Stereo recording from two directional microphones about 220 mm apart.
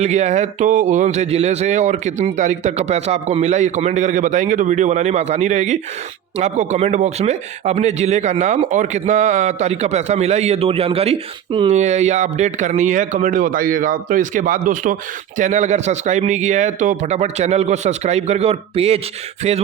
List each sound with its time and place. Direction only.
0.0 s speech: 30° right (ahead or behind)